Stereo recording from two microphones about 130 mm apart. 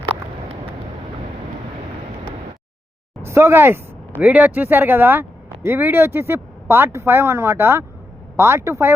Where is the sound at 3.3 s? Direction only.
20° right (ahead or behind).